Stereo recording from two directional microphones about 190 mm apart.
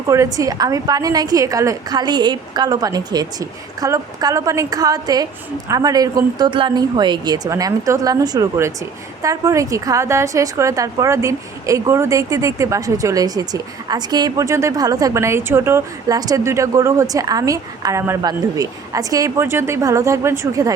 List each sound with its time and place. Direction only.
0.1 s a woman's voice: 15° right (ahead or behind)